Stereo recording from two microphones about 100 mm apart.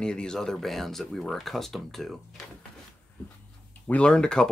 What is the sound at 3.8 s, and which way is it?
Speech, 10° left (ahead or behind).